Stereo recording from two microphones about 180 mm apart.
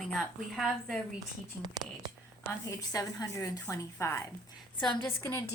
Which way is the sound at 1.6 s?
25° right (ahead or behind).